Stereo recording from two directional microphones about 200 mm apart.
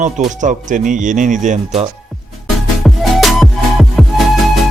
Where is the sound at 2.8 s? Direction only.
Centre (ahead or behind).